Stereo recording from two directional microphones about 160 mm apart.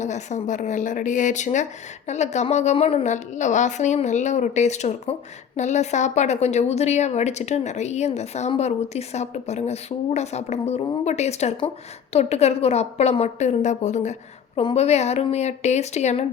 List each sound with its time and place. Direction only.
0.0 s a woman's voice: 45° left (ahead or behind)